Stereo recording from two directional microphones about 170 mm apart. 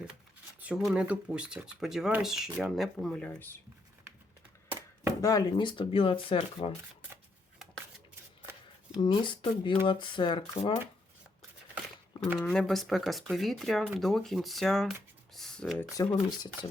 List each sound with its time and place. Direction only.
0.6 s speech: 5° right (ahead or behind)
5.2 s speech: 20° left (ahead or behind)
9.0 s speech: 25° left (ahead or behind)
12.4 s speech: centre (ahead or behind)
15.3 s a sound: centre (ahead or behind)
15.8 s speech: 15° left (ahead or behind)